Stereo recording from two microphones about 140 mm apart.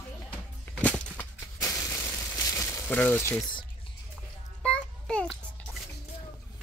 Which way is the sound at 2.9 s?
10° left (ahead or behind).